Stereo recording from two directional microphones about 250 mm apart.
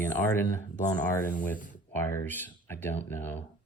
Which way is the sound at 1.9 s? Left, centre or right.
Centre.